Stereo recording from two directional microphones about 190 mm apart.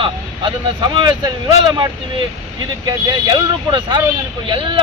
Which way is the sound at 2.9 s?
20° right (ahead or behind).